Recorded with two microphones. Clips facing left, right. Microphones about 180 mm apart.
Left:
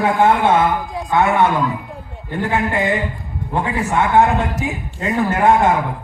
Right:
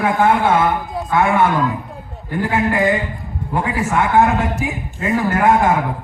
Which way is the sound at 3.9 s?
20° left (ahead or behind).